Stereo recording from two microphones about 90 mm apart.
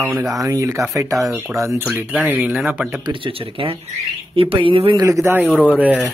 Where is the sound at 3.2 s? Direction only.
80° right.